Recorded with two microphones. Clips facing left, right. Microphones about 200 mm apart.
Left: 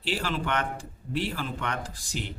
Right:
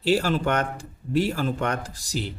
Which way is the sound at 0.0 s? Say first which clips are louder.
Right 8 dB; 40° right (ahead or behind).